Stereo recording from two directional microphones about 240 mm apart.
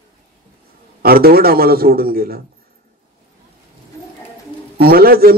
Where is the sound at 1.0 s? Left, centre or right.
Right.